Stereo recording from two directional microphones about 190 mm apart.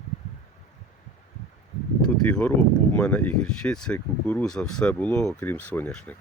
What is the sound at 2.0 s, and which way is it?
Speech, 5° left (ahead or behind).